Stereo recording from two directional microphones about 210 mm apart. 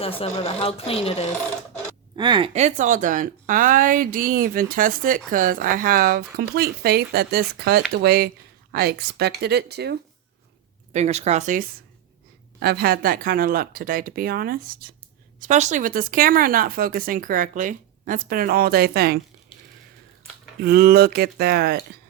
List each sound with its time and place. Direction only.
0.0 s speech: 25° left (ahead or behind)
2.1 s speech: 20° right (ahead or behind); by 10.0 s 50° right (ahead or behind)
10.9 s speech: 30° right (ahead or behind); by 19.2 s 45° right (ahead or behind)
20.6 s speech: 45° right (ahead or behind)